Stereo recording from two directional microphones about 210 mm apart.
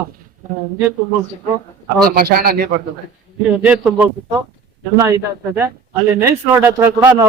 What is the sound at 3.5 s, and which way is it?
Speech, 5° right (ahead or behind).